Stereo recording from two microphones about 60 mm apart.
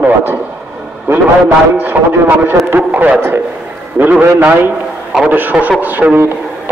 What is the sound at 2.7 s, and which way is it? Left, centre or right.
A man's voice, right.